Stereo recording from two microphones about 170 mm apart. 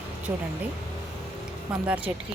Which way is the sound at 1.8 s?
10° right (ahead or behind).